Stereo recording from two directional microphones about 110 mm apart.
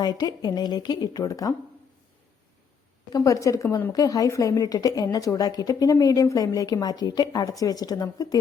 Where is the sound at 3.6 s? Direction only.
20° left (ahead or behind).